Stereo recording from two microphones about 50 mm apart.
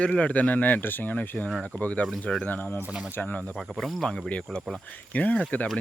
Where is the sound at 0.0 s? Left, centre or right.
Left.